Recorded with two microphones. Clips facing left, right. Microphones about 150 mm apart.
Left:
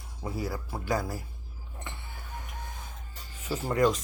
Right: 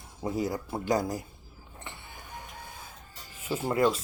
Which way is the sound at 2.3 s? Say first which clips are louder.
Left 1 dB; 15° right (ahead or behind).